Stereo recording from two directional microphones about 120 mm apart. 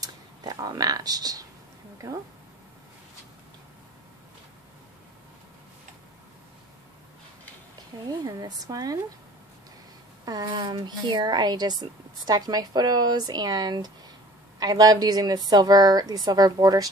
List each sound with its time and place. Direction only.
0.0 s a sound: 30° right (ahead or behind)
8.1 s speech: 30° right (ahead or behind)
10.2 s speech: 35° right (ahead or behind)